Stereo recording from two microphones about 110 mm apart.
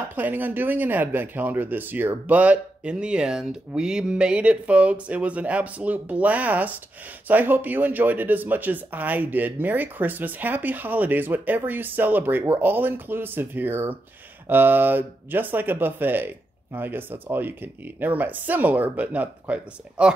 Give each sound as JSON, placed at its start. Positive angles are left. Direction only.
{"t": 0.1, "sound": "speech", "side_deg": -15}